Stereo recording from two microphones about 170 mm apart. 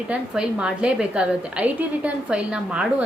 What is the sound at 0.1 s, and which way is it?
A woman's voice, 5° right (ahead or behind).